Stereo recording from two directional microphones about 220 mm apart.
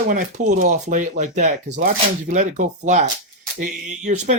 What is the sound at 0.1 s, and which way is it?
Speech, 35° right (ahead or behind).